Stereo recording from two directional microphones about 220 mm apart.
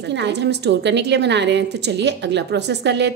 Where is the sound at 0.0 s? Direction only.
50° right (ahead or behind).